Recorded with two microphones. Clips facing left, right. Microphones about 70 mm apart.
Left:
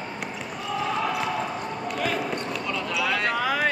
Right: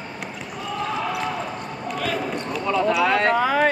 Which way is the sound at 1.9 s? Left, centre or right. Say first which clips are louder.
Right 2 dB; centre.